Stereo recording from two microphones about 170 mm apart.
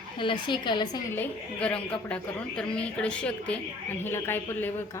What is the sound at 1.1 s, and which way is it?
A woman's voice, 10° left (ahead or behind).